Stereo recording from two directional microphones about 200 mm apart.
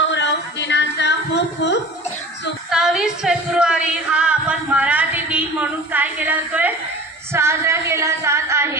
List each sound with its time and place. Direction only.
0.1 s a sound: 60° left (ahead or behind)
2.7 s music: centre (ahead or behind)
7.3 s singing: 15° right (ahead or behind)